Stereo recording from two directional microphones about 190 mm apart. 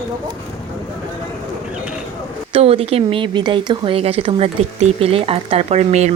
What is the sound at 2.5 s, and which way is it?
Speech, 30° right (ahead or behind).